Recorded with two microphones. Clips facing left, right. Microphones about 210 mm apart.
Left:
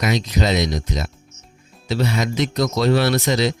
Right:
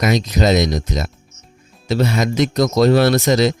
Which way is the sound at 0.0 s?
45° right (ahead or behind).